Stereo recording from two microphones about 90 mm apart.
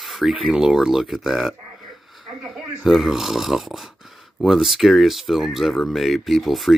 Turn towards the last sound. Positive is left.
turn(degrees=0)  # may be behind; listen again after turning